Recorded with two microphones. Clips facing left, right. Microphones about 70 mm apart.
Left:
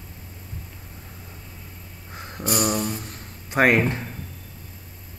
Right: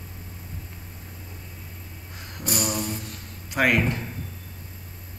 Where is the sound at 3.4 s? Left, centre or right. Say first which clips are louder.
Left 3 dB; left.